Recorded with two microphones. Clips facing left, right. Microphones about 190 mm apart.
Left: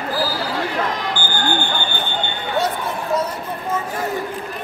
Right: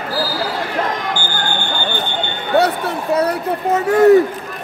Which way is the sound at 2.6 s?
70° right (ahead or behind).